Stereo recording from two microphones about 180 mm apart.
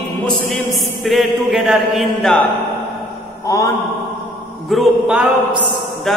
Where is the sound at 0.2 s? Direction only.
Centre (ahead or behind).